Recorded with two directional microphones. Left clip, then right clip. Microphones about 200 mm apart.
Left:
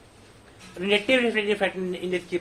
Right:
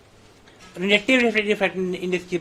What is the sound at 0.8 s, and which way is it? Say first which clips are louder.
Speech: right 3 dB; 50° right (ahead or behind).